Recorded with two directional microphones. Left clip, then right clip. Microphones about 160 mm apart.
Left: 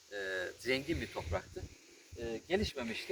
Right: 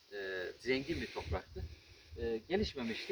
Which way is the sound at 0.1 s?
35° left (ahead or behind).